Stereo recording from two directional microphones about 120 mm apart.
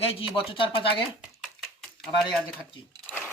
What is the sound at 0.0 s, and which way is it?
Speech, 50° left (ahead or behind).